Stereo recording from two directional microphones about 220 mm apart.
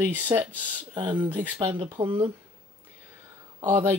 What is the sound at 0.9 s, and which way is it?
Speech, 20° right (ahead or behind).